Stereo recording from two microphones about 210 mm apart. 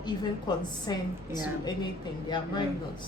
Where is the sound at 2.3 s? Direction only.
20° left (ahead or behind).